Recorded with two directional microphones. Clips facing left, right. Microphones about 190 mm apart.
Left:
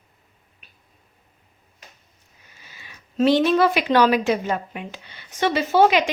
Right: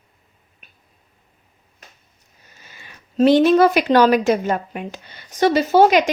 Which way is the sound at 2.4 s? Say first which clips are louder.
Right 2 dB; 45° right (ahead or behind).